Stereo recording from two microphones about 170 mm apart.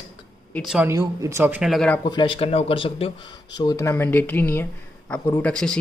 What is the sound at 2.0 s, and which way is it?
Speech, 30° left (ahead or behind).